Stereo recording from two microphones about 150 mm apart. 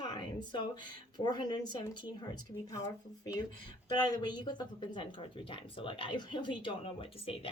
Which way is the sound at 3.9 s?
30° left (ahead or behind).